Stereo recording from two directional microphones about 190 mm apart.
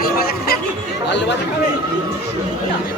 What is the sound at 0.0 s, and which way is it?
Chatter, 55° left (ahead or behind).